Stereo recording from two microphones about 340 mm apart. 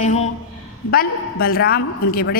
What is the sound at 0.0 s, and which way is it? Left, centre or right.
A man's voice, centre.